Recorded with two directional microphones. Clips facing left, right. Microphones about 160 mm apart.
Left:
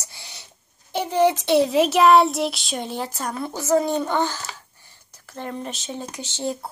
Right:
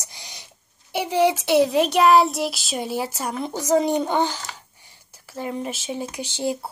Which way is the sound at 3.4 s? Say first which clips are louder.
Right 1 dB; 15° right (ahead or behind).